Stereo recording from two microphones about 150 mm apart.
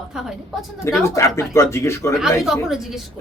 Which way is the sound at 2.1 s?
5° right (ahead or behind).